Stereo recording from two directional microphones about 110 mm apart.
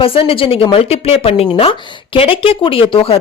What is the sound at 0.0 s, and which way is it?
A woman's voice, 55° left (ahead or behind).